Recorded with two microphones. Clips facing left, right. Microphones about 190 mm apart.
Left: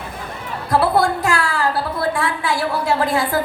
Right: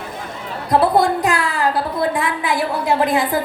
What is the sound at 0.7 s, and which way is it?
A woman's voice, 20° right (ahead or behind).